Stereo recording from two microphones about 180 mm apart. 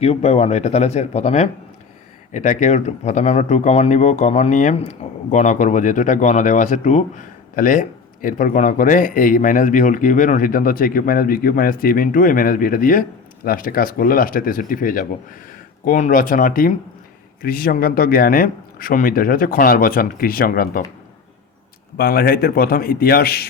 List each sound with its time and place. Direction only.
0.0 s speech: 35° left (ahead or behind); by 20.8 s 55° left (ahead or behind)
21.9 s a man's voice: 55° left (ahead or behind)